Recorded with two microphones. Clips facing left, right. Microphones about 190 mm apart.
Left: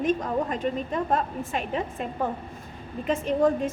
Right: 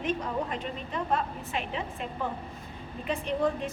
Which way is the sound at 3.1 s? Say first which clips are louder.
Left 6 dB; 45° left (ahead or behind).